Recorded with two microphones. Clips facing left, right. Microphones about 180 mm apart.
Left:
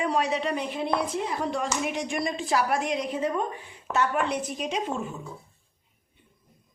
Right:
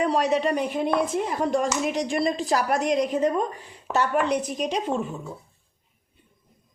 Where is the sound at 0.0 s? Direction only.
40° right (ahead or behind).